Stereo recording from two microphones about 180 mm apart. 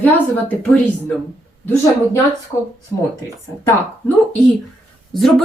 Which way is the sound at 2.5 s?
25° left (ahead or behind).